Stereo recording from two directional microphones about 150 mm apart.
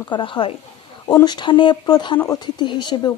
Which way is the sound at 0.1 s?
35° left (ahead or behind).